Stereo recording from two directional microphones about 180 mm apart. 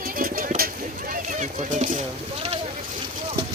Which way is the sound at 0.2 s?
50° right (ahead or behind).